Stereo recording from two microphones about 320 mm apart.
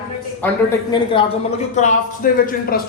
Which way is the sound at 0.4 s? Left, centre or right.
Centre.